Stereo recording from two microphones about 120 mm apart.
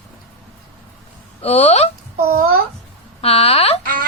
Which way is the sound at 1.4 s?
60° left (ahead or behind).